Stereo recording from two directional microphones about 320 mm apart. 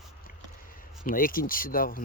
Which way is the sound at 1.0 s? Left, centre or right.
Left.